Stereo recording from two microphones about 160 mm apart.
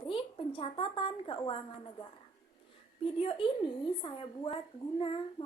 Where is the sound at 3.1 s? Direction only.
30° left (ahead or behind).